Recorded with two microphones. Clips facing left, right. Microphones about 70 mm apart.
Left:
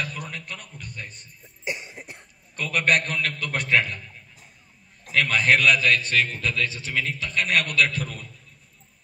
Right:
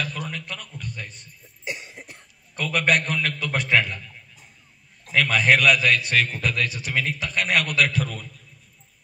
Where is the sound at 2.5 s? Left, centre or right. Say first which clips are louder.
Right 1 dB; centre.